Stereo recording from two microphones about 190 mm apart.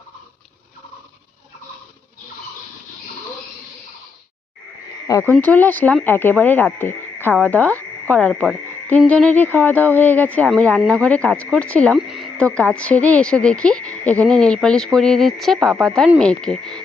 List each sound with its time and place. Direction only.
5.0 s speech: 15° left (ahead or behind)